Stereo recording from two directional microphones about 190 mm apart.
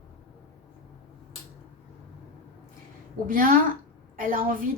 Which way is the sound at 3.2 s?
45° right (ahead or behind).